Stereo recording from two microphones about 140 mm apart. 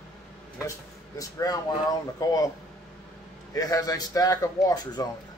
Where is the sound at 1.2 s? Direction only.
25° left (ahead or behind).